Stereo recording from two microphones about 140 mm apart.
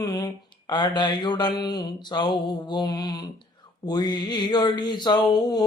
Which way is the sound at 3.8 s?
30° left (ahead or behind).